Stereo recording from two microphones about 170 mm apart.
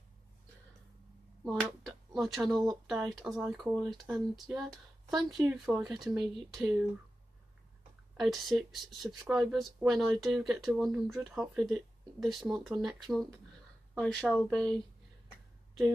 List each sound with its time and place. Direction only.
1.8 s a sound: centre (ahead or behind)
2.9 s speech: centre (ahead or behind)
4.6 s speech: 20° right (ahead or behind)
5.5 s speech: 5° right (ahead or behind)
8.2 s speech: centre (ahead or behind)